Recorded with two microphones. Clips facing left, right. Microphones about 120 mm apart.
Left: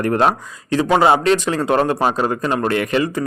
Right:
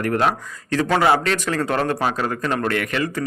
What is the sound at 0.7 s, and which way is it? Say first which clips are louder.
A man's voice: left 3 dB; 15° left (ahead or behind).